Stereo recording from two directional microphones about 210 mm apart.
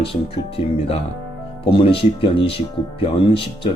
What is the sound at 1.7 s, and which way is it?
Speech, 25° left (ahead or behind).